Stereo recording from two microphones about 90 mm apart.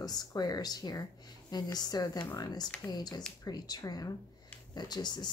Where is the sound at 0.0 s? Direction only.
45° left (ahead or behind).